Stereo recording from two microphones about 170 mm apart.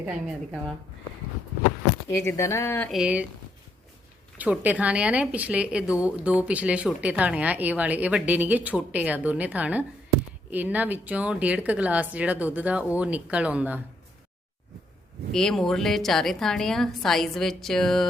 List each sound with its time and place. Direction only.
0.0 s speech: 5° right (ahead or behind)
2.0 s speech: 15° left (ahead or behind)
2.9 s a woman's voice: 5° right (ahead or behind)
4.4 s speech: 10° right (ahead or behind)
15.3 s a woman's voice: 5° left (ahead or behind)